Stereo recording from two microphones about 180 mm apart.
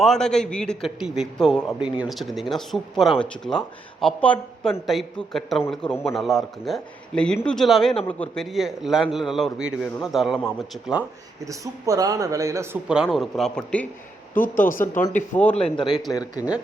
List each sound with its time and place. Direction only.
0.0 s a man's voice: 5° left (ahead or behind)
11.4 s speech: 20° right (ahead or behind)
12.9 s a man's voice: centre (ahead or behind)
14.4 s speech: 50° left (ahead or behind)
16.1 s speech: 20° left (ahead or behind)